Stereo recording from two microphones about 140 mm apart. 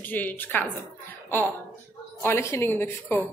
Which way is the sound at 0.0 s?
10° left (ahead or behind).